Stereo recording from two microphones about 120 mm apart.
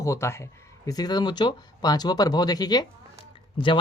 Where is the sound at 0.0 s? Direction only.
25° left (ahead or behind).